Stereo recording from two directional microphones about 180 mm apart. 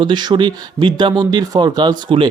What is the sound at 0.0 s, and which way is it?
Speech, 25° right (ahead or behind).